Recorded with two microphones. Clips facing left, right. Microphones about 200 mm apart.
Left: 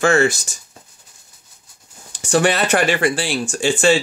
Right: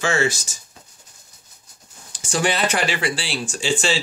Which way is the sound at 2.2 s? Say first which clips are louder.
Left 5 dB; 65° left (ahead or behind).